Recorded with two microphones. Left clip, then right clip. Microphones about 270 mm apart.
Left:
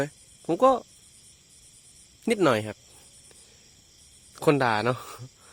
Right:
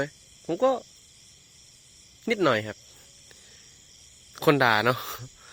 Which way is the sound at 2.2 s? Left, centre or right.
Centre.